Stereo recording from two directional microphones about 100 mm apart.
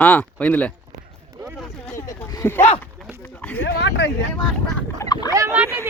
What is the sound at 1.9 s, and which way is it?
Speech, 30° left (ahead or behind).